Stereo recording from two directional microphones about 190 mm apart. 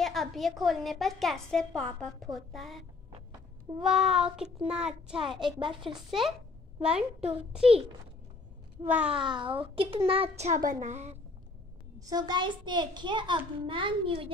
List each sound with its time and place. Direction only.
0.0 s a woman's voice: centre (ahead or behind)
3.8 s a woman's voice: centre (ahead or behind)
5.3 s a child's voice: 25° right (ahead or behind)
5.8 s a woman's voice: centre (ahead or behind)
8.8 s a sound: 5° right (ahead or behind)
9.2 s a child's voice: 25° right (ahead or behind)
12.0 s a child's voice: 20° right (ahead or behind)